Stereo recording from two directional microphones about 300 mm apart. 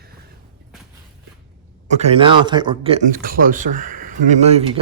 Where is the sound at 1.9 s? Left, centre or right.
Right.